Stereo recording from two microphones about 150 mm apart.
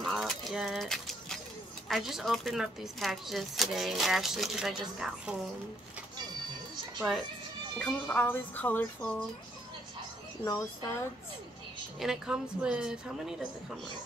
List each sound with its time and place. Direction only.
0.0 s pigeon: centre (ahead or behind)
1.9 s speech: centre (ahead or behind)
7.0 s speech: centre (ahead or behind)
10.4 s a woman's voice: 25° left (ahead or behind)
12.0 s speech: 5° right (ahead or behind)